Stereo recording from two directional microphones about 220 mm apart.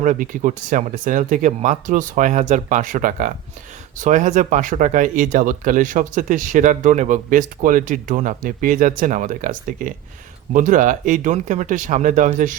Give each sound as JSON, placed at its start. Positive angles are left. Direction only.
{"t": 0.0, "sound": "speech", "side_deg": -35}